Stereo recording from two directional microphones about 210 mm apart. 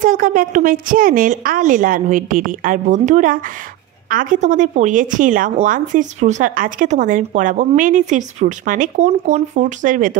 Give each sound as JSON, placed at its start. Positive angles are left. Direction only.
{"t": 0.0, "sound": "a woman's voice", "side_deg": -40}